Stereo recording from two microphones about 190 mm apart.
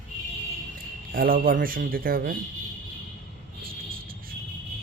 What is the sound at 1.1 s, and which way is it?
Speech, 50° right (ahead or behind).